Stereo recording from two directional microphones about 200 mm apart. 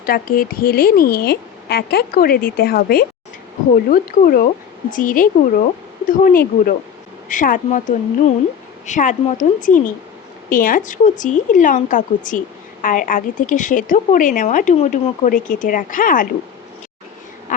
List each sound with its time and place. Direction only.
0.0 s a woman's voice: 45° left (ahead or behind)